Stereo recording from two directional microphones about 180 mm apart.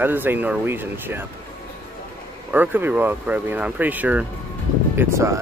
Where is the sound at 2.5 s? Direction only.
10° right (ahead or behind).